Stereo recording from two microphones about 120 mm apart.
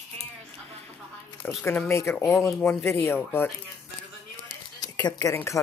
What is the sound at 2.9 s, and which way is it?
Speech, 20° left (ahead or behind).